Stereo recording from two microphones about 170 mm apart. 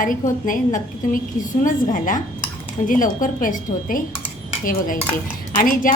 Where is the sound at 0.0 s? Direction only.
50° left (ahead or behind).